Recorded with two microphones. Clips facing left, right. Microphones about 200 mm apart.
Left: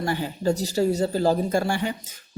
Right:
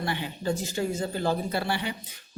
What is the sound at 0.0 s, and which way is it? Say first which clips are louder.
Speech: left 6 dB; 40° left (ahead or behind).